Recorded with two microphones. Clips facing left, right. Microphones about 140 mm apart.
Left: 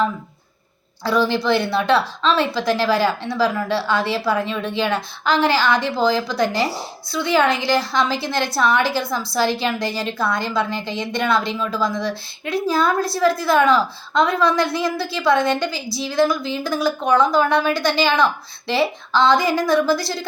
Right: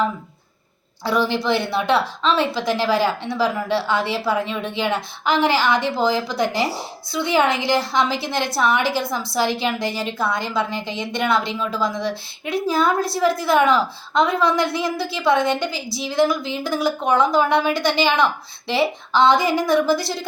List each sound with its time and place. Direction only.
1.0 s a woman's voice: 20° right (ahead or behind)